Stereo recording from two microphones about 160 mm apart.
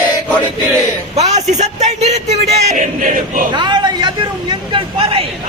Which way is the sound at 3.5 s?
30° right (ahead or behind).